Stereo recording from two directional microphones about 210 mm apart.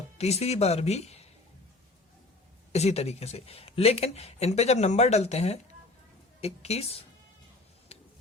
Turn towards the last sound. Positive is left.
turn(degrees=30)  # may be behind; listen again after turning